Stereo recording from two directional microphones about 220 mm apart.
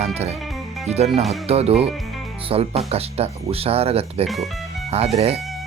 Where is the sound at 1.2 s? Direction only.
Centre (ahead or behind).